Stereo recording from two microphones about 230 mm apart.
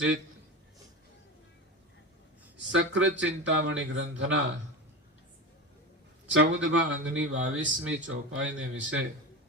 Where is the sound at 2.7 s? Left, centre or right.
Right.